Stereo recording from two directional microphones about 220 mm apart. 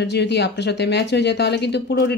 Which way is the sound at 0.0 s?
50° left (ahead or behind).